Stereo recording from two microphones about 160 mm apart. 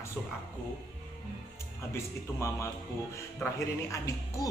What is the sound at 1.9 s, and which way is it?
Speech, 15° left (ahead or behind).